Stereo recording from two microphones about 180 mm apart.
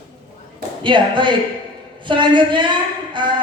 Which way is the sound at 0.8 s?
25° right (ahead or behind).